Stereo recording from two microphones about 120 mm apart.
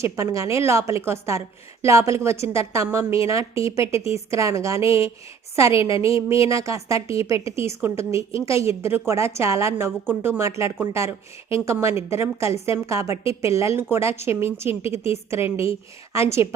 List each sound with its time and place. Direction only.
0.0 s a woman's voice: 25° right (ahead or behind)